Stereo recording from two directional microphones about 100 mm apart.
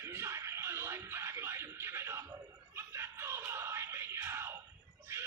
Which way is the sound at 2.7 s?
25° right (ahead or behind).